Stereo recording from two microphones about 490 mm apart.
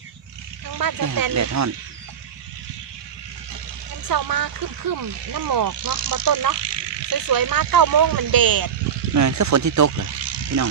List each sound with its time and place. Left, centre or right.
0.8 s speech: right
4.1 s speech: right
10.2 s a sound: right